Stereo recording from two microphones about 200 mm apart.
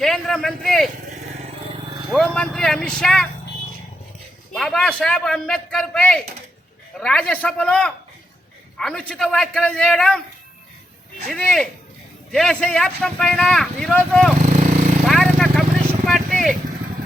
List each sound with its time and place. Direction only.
0.0 s a man's voice: centre (ahead or behind)
2.0 s speech: 5° left (ahead or behind)
4.5 s speech: centre (ahead or behind)
11.3 s speech: 5° left (ahead or behind)
14.5 s a sound: 40° right (ahead or behind)
15.0 s vehicle: centre (ahead or behind)